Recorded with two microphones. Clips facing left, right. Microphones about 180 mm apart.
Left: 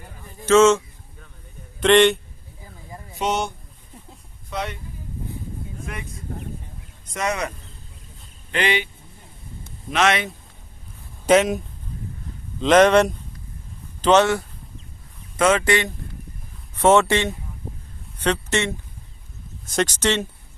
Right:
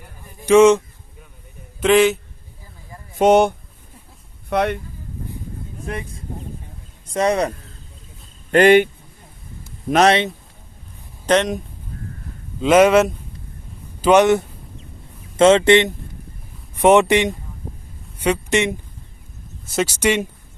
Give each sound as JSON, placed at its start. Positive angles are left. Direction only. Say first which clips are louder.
{"t": 0.4, "sound": "speech", "louder": "right 3 dB", "side_deg": -15}
{"t": 1.8, "sound": "a man's voice", "louder": "right 1 dB", "side_deg": -5}
{"t": 3.2, "sound": "speech", "louder": "right 11 dB", "side_deg": -55}
{"t": 5.8, "sound": "speech", "louder": "right 10 dB", "side_deg": -30}
{"t": 8.4, "sound": "speech", "louder": "right 12 dB", "side_deg": -50}
{"t": 9.9, "sound": "speech", "louder": "right 6 dB", "side_deg": -40}
{"t": 11.3, "sound": "a man's voice", "louder": "left 1 dB", "side_deg": 5}
{"t": 12.5, "sound": "speech", "louder": "right 2 dB", "side_deg": -10}